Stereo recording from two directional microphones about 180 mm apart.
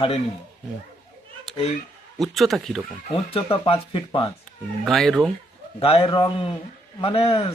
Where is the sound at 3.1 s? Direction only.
30° left (ahead or behind).